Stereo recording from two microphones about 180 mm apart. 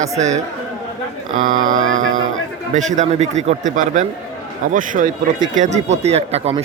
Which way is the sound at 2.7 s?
40° right (ahead or behind).